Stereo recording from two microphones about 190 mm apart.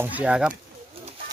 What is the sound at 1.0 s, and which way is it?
Bird, 30° right (ahead or behind).